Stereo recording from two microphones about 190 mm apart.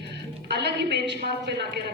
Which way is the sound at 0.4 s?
60° right (ahead or behind).